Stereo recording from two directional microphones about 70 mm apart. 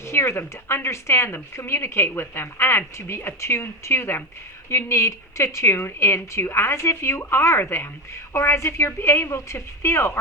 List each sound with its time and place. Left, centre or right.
0.0 s speech: left